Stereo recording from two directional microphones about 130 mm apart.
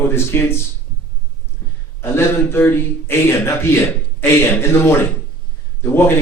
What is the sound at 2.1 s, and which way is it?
A man's voice, 20° left (ahead or behind).